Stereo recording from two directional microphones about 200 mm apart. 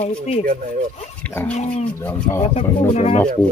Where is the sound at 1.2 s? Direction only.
10° left (ahead or behind).